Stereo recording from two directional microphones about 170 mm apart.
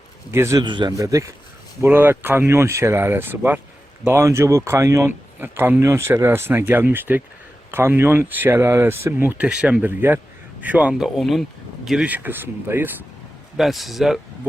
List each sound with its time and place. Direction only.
0.3 s speech: 15° right (ahead or behind)
0.6 s a man's voice: 25° right (ahead or behind)
13.6 s speech: centre (ahead or behind)